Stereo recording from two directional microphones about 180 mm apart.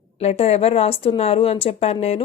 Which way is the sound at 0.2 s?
35° left (ahead or behind).